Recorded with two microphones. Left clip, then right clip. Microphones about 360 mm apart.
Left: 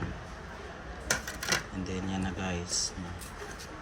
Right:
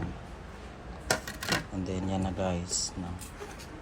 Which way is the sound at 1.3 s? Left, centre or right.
Right.